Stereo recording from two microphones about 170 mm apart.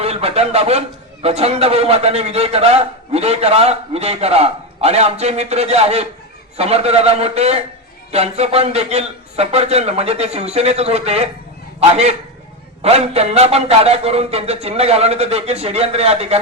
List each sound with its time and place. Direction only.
0.0 s a man's voice: 35° right (ahead or behind)